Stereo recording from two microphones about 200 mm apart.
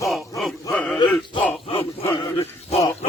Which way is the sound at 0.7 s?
5° left (ahead or behind).